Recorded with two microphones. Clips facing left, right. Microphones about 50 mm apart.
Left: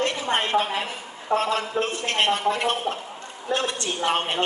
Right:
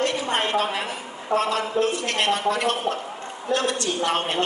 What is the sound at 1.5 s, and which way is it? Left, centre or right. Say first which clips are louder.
A man's voice: right 2 dB; left.